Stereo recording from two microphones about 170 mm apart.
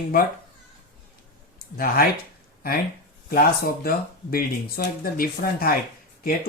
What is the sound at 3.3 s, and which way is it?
Speech, 60° left (ahead or behind).